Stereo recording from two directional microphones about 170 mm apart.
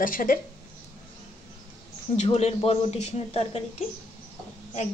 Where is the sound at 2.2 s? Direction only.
40° left (ahead or behind).